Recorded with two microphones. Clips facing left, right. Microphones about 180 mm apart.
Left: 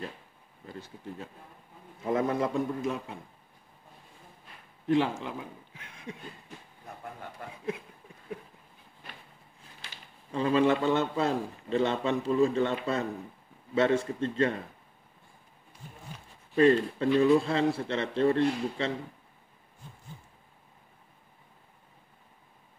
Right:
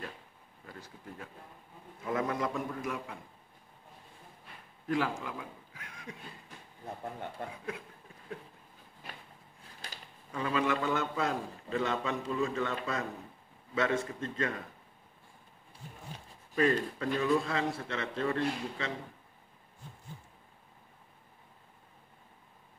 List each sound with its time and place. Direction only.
0.7 s a man's voice: 25° left (ahead or behind)
4.8 s a man's voice: 25° left (ahead or behind)
7.0 s a man's voice: 25° right (ahead or behind)
10.3 s a man's voice: 30° left (ahead or behind)
16.5 s a man's voice: 30° left (ahead or behind)